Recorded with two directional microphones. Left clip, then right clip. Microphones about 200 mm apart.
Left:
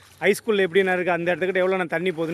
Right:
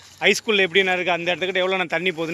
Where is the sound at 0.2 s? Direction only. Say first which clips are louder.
Right 2 dB; 25° left (ahead or behind).